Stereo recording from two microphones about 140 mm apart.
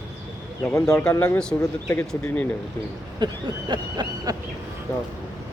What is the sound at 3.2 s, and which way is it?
Speech, 35° right (ahead or behind).